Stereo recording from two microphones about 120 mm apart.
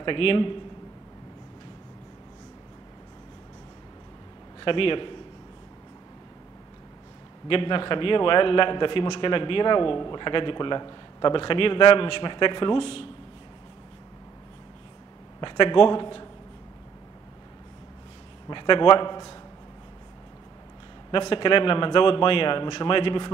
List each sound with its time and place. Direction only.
0.0 s a man's voice: 45° left (ahead or behind)
4.6 s a man's voice: 45° left (ahead or behind)
7.4 s a man's voice: 45° left (ahead or behind)
15.4 s a man's voice: 40° left (ahead or behind)
18.5 s a man's voice: 40° left (ahead or behind)
21.3 s a man's voice: 45° left (ahead or behind)